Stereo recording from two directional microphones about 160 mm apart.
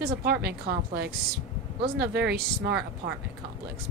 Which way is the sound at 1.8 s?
85° right.